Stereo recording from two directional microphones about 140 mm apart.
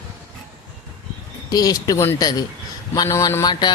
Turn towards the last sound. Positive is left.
turn(degrees=25)  # may be behind; listen again after turning